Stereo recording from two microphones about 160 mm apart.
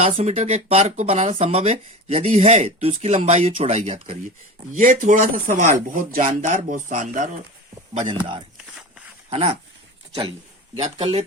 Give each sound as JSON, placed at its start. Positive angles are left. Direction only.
{"t": 0.0, "sound": "speech", "side_deg": -45}
{"t": 9.3, "sound": "speech", "side_deg": -40}
{"t": 10.9, "sound": "speech", "side_deg": -40}